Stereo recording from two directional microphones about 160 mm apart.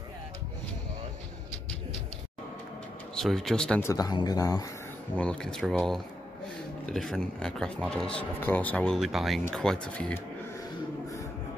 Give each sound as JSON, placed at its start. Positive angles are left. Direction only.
{"t": 3.2, "sound": "speech", "side_deg": 0}
{"t": 3.8, "sound": "speech", "side_deg": 25}
{"t": 5.1, "sound": "speech", "side_deg": 5}